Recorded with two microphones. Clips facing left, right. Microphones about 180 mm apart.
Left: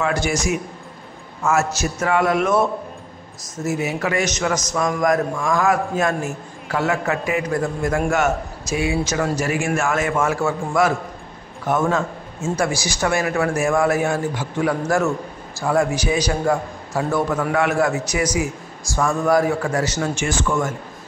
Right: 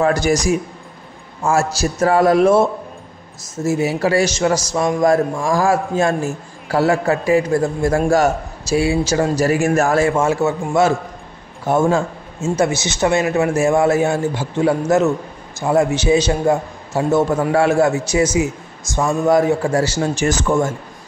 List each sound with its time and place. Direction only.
0.0 s a man's voice: 40° right (ahead or behind)